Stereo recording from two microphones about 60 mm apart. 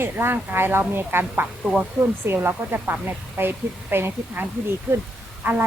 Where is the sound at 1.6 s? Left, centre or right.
Centre.